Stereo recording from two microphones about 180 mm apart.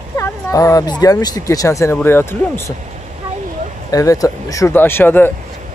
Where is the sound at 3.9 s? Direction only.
20° left (ahead or behind).